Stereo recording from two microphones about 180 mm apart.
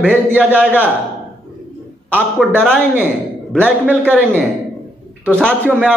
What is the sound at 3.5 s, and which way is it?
Speech, 10° right (ahead or behind).